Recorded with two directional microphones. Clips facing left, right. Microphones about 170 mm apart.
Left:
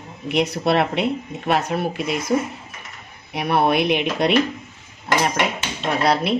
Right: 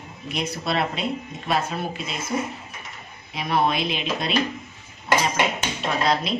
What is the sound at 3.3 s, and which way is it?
Speech, 65° left (ahead or behind).